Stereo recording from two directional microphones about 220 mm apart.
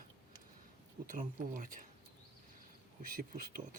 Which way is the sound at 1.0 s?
35° right (ahead or behind).